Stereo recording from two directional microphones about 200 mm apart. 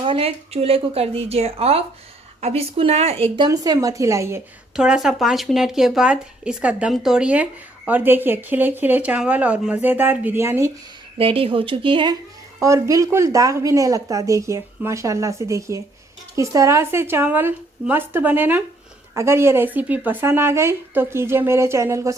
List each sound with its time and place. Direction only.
0.0 s speech: 30° right (ahead or behind)
4.8 s a woman's voice: 5° right (ahead or behind)
11.2 s a woman's voice: 30° right (ahead or behind)